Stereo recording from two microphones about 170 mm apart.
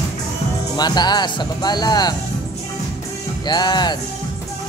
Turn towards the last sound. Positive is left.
turn(degrees=25)  # may be behind; listen again after turning